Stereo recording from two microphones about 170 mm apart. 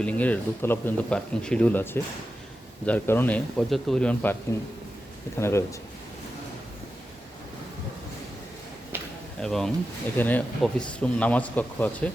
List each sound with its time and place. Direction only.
0.0 s speech: 10° left (ahead or behind)
5.4 s speech: 15° left (ahead or behind)
9.4 s speech: centre (ahead or behind)